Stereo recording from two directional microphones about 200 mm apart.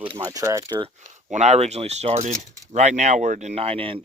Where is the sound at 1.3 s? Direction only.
35° right (ahead or behind).